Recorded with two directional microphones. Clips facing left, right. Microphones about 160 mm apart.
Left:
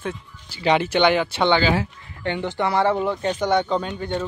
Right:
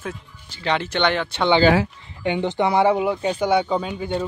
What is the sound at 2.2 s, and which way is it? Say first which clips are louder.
Speech: right 3 dB; 15° right (ahead or behind).